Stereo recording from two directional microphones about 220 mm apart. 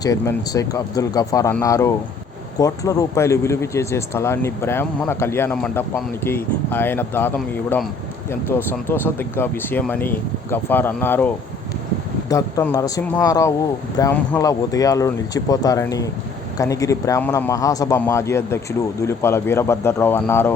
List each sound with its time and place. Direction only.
0.0 s speech: 15° left (ahead or behind)
12.3 s speech: 15° left (ahead or behind)